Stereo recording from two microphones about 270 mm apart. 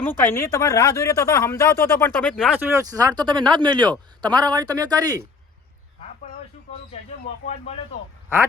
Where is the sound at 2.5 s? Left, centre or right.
Centre.